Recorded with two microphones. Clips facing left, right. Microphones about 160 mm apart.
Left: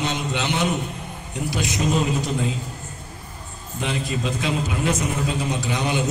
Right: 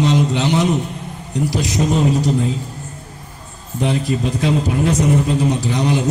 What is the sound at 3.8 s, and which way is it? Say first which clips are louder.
A man's voice: right 7 dB; 35° right (ahead or behind).